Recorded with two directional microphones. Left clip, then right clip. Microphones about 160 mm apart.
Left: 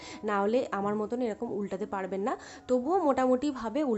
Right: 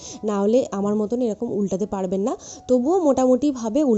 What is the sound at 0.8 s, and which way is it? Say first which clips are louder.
Speech: right 8 dB; 5° right (ahead or behind).